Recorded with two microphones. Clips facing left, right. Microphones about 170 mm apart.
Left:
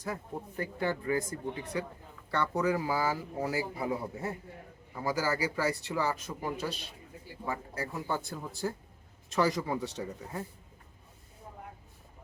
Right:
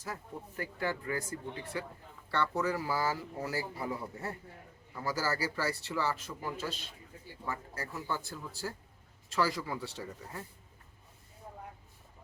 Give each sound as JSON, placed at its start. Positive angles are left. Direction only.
{"t": 0.1, "sound": "speech", "side_deg": 20}
{"t": 4.9, "sound": "speech", "side_deg": 15}